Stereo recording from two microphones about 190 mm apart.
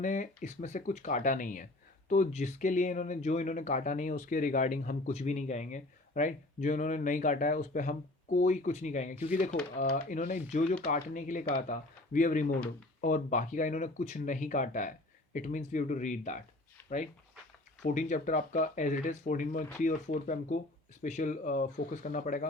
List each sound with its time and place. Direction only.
0.0 s speech: 40° left (ahead or behind)
12.5 s speech: 10° left (ahead or behind)
13.0 s speech: 40° left (ahead or behind)
17.8 s speech: 40° left (ahead or behind)